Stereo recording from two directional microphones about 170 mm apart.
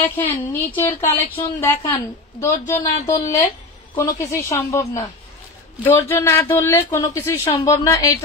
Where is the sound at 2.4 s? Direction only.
20° left (ahead or behind).